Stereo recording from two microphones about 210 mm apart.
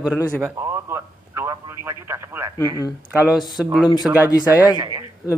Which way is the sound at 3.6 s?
Centre (ahead or behind).